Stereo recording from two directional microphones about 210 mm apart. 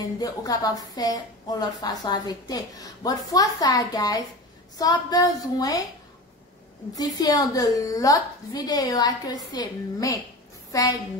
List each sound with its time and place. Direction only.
0.2 s a woman's voice: 15° left (ahead or behind)
7.0 s a woman's voice: 15° left (ahead or behind)